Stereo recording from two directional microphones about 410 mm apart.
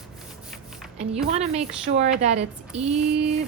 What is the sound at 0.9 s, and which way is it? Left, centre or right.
A woman's voice, centre.